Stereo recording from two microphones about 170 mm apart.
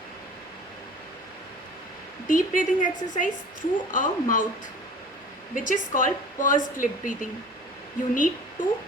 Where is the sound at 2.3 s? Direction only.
50° left (ahead or behind).